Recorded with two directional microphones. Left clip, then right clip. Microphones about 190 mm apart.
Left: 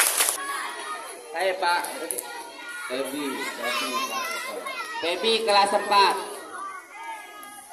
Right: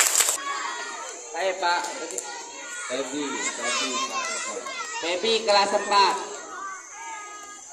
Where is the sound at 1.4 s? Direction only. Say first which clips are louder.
Left 1 dB; 60° left (ahead or behind).